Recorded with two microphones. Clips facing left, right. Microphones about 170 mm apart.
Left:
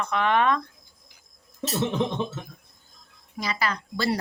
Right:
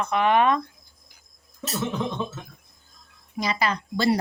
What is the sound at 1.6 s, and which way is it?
Speech, 25° left (ahead or behind).